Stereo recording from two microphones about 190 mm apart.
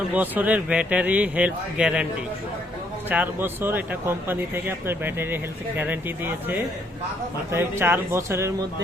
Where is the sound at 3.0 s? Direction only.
10° right (ahead or behind).